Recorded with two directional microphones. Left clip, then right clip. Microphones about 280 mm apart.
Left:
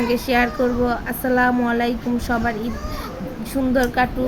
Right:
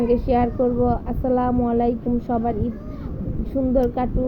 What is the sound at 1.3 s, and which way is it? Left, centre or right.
Speech, left.